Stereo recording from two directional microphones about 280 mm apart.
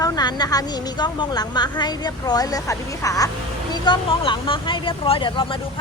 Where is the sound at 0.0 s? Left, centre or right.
Centre.